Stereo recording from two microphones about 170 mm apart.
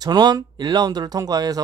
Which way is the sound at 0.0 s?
25° right (ahead or behind).